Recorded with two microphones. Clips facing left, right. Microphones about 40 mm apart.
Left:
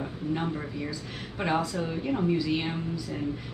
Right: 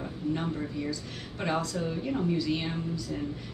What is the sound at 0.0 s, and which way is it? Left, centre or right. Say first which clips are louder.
Speech: left 1 dB; centre.